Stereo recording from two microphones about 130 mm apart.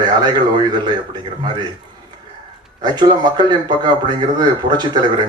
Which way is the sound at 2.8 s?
35° right (ahead or behind).